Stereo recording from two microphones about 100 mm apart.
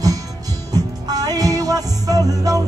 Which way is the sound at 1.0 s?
40° right (ahead or behind).